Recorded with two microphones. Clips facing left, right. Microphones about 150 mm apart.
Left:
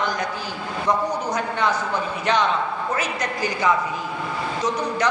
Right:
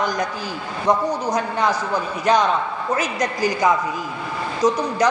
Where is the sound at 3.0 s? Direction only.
40° right (ahead or behind).